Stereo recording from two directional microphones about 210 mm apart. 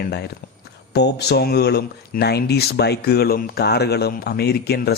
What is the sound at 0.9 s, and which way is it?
A man's voice, 50° left (ahead or behind).